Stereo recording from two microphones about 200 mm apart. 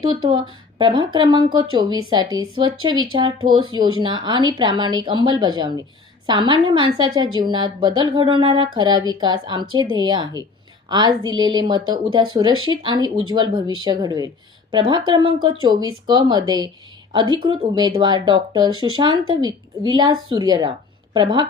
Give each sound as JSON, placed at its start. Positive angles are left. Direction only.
{"t": 0.0, "sound": "speech", "side_deg": -25}